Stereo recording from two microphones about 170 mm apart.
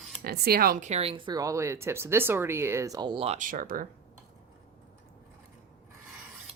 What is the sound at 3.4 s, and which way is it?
Speech, 50° right (ahead or behind).